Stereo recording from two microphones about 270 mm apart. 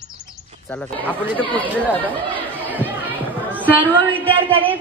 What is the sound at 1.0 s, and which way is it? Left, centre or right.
Speech, centre.